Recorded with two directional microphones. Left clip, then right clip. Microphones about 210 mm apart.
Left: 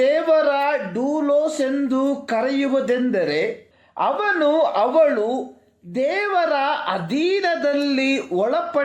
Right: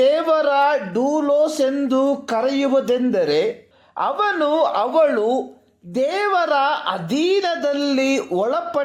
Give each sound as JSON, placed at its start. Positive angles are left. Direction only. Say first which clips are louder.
{"t": 0.0, "sound": "a woman's voice", "louder": "even", "side_deg": -25}